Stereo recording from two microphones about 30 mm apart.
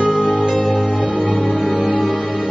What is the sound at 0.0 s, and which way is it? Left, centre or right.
Music, left.